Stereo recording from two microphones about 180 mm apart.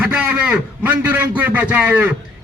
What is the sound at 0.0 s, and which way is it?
A man's voice, 5° right (ahead or behind).